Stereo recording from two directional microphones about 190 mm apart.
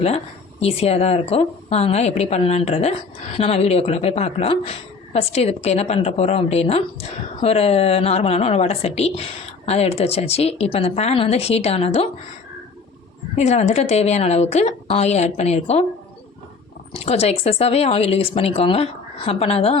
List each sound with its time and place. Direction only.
0.6 s a woman's voice: 30° left (ahead or behind)
13.3 s a woman's voice: 35° left (ahead or behind)
16.9 s a woman's voice: 35° left (ahead or behind)